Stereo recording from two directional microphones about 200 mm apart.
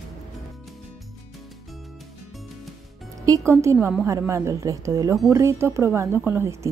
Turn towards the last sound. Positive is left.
turn(degrees=-15)  # may be behind; listen again after turning